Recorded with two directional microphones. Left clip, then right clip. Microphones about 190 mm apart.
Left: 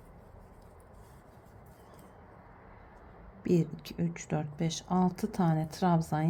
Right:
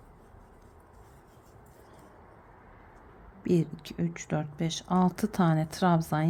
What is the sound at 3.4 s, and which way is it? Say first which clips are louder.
Speech: right 2 dB; 5° right (ahead or behind).